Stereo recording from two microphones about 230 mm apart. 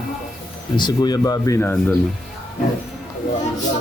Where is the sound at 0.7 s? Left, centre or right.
Centre.